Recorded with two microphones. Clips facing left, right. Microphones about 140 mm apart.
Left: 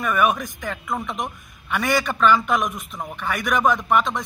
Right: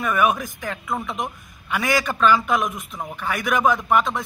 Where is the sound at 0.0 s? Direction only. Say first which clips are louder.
Even; centre (ahead or behind).